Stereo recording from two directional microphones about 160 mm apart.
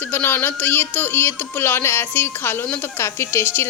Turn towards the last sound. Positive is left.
turn(degrees=15)  # may be behind; listen again after turning